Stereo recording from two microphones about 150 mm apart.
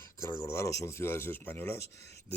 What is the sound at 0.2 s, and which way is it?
Speech, 20° left (ahead or behind).